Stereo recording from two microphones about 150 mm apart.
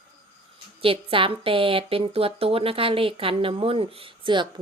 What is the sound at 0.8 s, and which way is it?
Speech, 35° right (ahead or behind).